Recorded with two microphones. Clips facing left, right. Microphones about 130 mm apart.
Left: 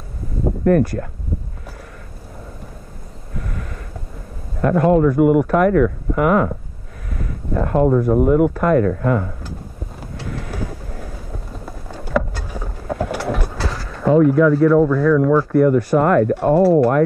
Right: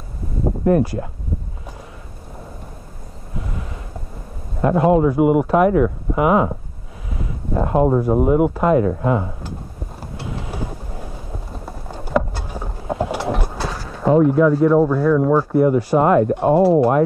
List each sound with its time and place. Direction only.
0.7 s speech: 15° right (ahead or behind)
3.3 s a sound: 15° right (ahead or behind)
4.6 s speech: 15° right (ahead or behind)
7.6 s speech: 10° right (ahead or behind)
8.6 s speech: 20° right (ahead or behind)
10.1 s vehicle: 15° right (ahead or behind)
16.3 s speech: 15° right (ahead or behind)